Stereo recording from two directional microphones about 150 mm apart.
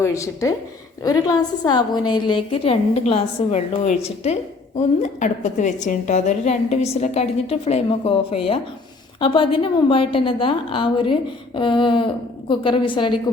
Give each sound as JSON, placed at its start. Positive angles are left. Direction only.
{"t": 0.0, "sound": "a woman's voice", "side_deg": 20}